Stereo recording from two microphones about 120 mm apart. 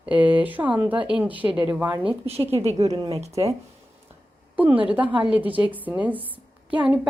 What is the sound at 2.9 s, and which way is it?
Speech, 35° right (ahead or behind).